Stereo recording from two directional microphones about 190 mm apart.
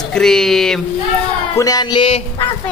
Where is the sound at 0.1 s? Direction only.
Centre (ahead or behind).